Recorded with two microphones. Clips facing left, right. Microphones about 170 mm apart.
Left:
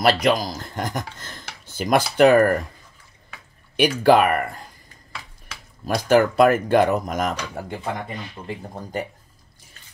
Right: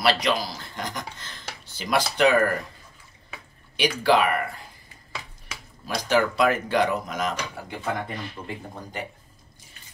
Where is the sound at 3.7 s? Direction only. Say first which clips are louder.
Left 5 dB; 50° left (ahead or behind).